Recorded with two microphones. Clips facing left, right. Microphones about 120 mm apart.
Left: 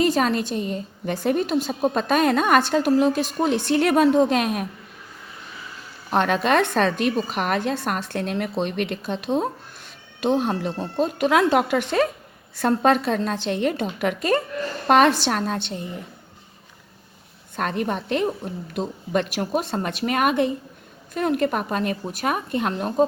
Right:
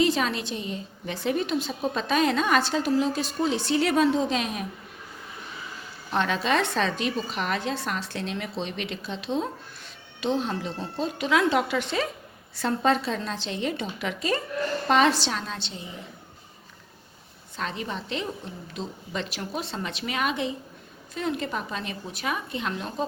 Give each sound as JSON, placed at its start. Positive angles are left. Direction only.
{"t": 0.0, "sound": "a woman's voice", "side_deg": 45}
{"t": 6.1, "sound": "a woman's voice", "side_deg": 55}
{"t": 17.6, "sound": "a woman's voice", "side_deg": 55}